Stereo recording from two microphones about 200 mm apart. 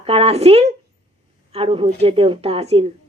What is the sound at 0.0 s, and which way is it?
A woman's voice, 30° right (ahead or behind).